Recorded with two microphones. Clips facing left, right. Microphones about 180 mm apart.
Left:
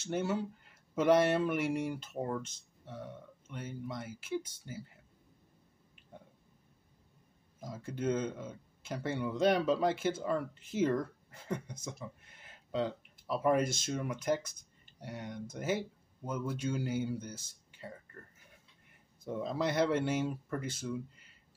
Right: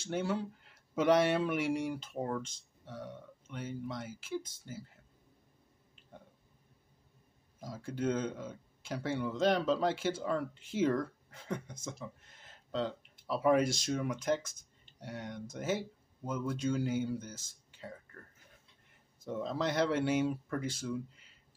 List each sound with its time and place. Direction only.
0.0 s speech: 5° left (ahead or behind)
7.6 s speech: 5° left (ahead or behind)
10.8 s a sound: 5° left (ahead or behind)
13.4 s speech: centre (ahead or behind)
19.2 s speech: 10° left (ahead or behind)